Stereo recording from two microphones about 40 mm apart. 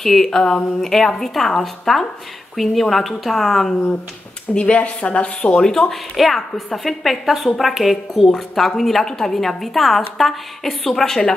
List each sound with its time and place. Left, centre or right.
0.0 s a woman's voice: centre
0.4 s a woman's voice: centre
0.7 s a woman's voice: centre
4.6 s speech: left
5.6 s a woman's voice: centre
6.1 s a woman's voice: centre